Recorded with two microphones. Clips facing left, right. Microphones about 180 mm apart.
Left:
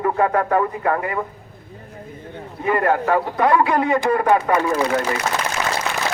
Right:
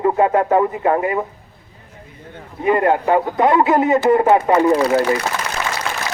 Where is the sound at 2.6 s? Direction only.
20° right (ahead or behind).